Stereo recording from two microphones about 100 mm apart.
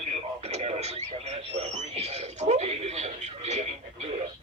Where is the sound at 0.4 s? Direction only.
90° right.